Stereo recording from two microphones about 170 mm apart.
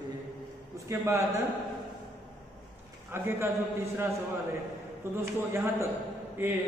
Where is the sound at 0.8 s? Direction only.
15° right (ahead or behind).